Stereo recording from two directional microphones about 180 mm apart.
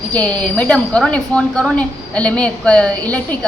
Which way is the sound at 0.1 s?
5° left (ahead or behind).